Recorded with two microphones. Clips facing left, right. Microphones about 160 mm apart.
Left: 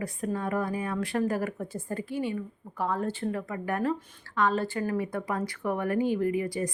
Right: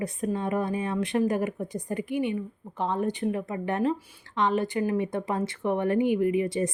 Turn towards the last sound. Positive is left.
turn(degrees=-20)  # may be behind; listen again after turning